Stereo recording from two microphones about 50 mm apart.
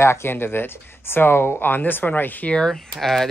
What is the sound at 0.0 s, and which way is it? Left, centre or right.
Speech, left.